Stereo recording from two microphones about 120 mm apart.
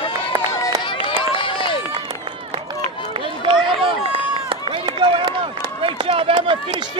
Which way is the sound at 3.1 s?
45° right (ahead or behind).